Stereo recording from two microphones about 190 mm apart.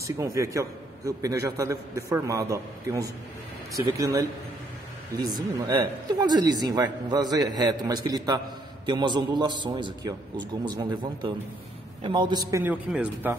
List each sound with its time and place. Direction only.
0.0 s a man's voice: 15° right (ahead or behind)